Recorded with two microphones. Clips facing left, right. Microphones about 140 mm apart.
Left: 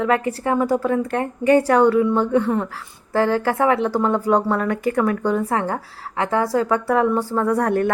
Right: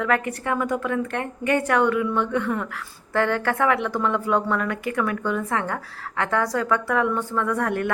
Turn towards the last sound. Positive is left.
turn(degrees=35)  # may be behind; listen again after turning